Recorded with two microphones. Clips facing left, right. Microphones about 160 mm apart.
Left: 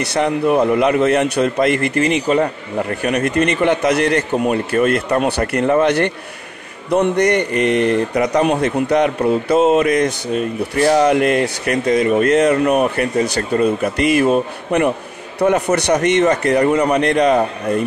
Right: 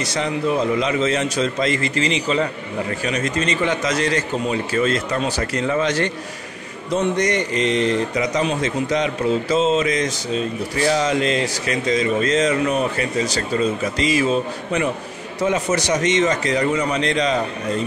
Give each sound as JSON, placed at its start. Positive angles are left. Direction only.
{"t": 0.0, "sound": "speech", "side_deg": 60}